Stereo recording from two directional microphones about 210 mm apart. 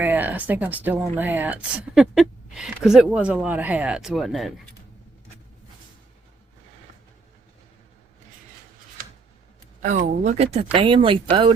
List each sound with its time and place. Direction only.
0.0 s speech: 10° right (ahead or behind)
10.2 s speech: 30° right (ahead or behind)